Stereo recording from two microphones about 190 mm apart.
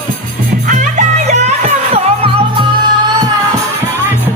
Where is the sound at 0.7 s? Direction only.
40° right (ahead or behind); by 3.3 s 25° right (ahead or behind).